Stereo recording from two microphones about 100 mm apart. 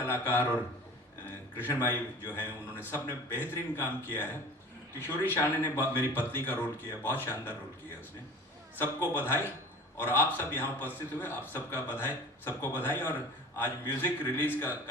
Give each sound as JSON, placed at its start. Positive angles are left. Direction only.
{"t": 0.0, "sound": "a man's voice", "side_deg": 20}
{"t": 9.2, "sound": "a man's voice", "side_deg": 20}